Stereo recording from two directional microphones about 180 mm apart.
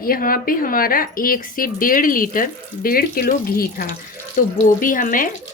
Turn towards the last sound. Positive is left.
turn(degrees=50)  # may be behind; listen again after turning